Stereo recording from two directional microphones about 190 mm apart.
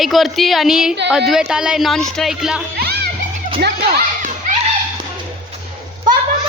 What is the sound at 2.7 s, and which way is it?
Music, 55° right (ahead or behind).